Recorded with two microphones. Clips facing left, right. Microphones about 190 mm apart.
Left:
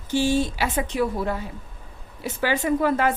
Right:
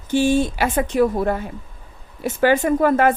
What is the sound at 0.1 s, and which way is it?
A woman's voice, 55° right (ahead or behind).